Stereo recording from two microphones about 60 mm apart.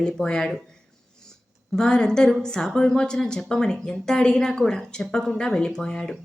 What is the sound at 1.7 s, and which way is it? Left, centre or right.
A woman's voice, centre.